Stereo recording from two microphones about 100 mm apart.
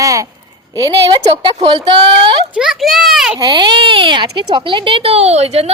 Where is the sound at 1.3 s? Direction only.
90° right.